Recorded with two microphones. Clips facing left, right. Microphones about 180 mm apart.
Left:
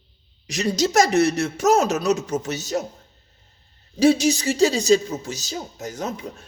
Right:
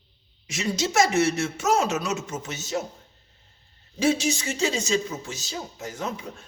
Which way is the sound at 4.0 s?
35° left (ahead or behind).